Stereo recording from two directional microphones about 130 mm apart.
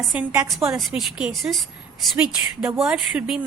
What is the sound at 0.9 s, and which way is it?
Speech, 5° right (ahead or behind).